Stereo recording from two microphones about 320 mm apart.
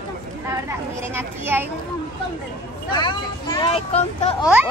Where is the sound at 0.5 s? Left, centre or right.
Centre.